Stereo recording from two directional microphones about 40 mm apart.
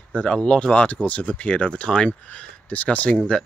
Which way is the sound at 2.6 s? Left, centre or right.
Left.